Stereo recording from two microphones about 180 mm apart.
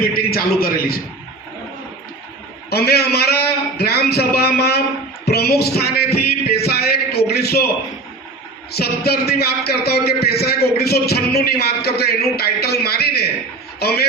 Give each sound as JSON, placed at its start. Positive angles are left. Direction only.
{"t": 0.0, "sound": "a man's voice", "side_deg": 55}
{"t": 2.6, "sound": "a man's voice", "side_deg": 60}
{"t": 8.7, "sound": "a man's voice", "side_deg": 60}